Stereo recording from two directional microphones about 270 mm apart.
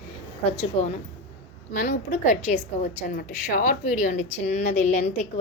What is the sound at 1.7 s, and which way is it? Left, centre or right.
Speech, left.